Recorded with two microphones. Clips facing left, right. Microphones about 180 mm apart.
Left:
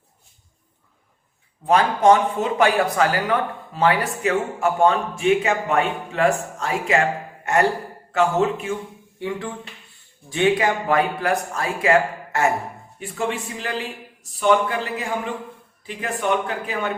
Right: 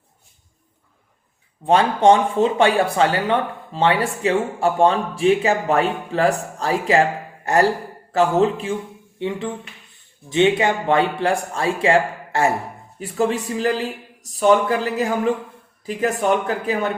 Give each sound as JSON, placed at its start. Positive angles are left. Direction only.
{"t": 1.6, "sound": "speech", "side_deg": -30}
{"t": 9.1, "sound": "speech", "side_deg": -20}